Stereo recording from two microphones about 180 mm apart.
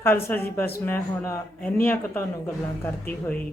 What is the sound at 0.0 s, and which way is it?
Speech, 10° left (ahead or behind).